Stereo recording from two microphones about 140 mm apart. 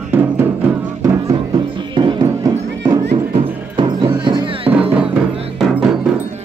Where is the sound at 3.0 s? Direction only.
50° right (ahead or behind).